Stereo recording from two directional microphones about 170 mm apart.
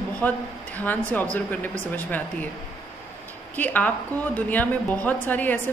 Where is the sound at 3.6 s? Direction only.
10° left (ahead or behind).